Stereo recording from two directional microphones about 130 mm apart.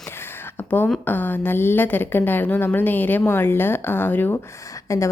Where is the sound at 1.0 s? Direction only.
15° left (ahead or behind).